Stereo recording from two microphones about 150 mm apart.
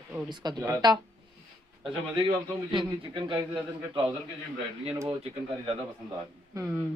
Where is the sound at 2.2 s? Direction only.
30° right (ahead or behind).